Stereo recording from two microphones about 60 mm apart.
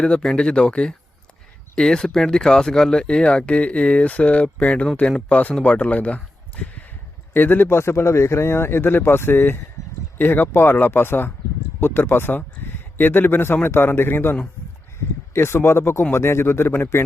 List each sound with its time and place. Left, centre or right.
0.0 s speech: centre
7.3 s speech: left
7.8 s speech: left
9.8 s a sound: left
10.2 s speech: left